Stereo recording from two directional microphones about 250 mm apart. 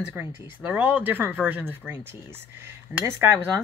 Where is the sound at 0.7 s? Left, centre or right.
Centre.